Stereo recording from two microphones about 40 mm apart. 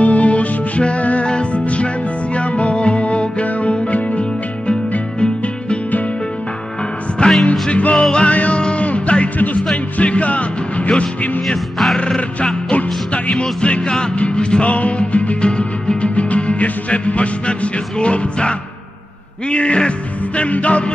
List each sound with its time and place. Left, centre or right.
0.0 s music: left
7.2 s music: left
8.3 s music: left
11.4 s music: centre
12.7 s music: left